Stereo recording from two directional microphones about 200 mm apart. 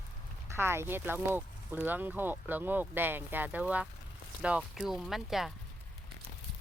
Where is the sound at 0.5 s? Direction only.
10° right (ahead or behind).